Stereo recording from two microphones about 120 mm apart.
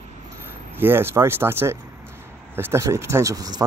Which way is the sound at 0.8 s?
20° right (ahead or behind).